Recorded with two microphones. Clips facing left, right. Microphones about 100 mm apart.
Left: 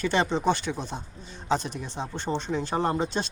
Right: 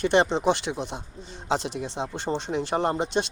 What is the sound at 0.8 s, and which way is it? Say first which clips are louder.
Speech: right 2 dB; 80° right.